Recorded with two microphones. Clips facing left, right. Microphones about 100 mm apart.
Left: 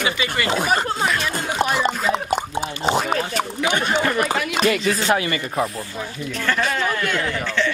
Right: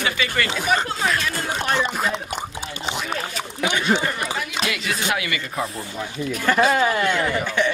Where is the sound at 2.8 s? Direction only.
40° left (ahead or behind).